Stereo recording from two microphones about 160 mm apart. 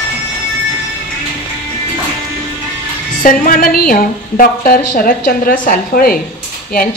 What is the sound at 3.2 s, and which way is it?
A woman's voice, 55° left (ahead or behind).